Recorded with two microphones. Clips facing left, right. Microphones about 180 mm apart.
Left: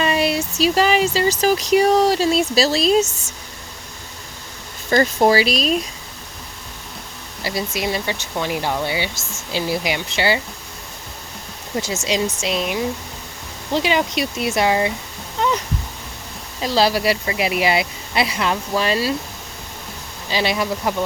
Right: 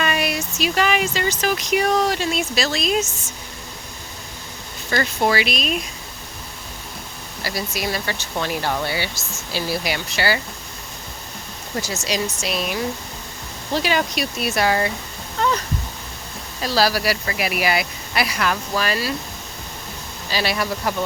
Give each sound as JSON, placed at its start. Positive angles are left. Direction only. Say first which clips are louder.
{"t": 0.0, "sound": "speech", "louder": "left 4 dB", "side_deg": 30}
{"t": 5.2, "sound": "speech", "louder": "left 3 dB", "side_deg": 35}
{"t": 7.4, "sound": "speech", "louder": "left 3 dB", "side_deg": 25}
{"t": 12.0, "sound": "speech", "louder": "left 4 dB", "side_deg": 20}
{"t": 15.4, "sound": "a sound", "louder": "left 1 dB", "side_deg": 15}
{"t": 16.6, "sound": "speech", "louder": "left 2 dB", "side_deg": 20}
{"t": 20.3, "sound": "speech", "louder": "left 2 dB", "side_deg": 20}